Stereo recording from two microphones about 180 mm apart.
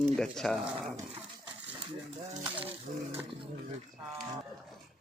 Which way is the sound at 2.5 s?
10° right (ahead or behind).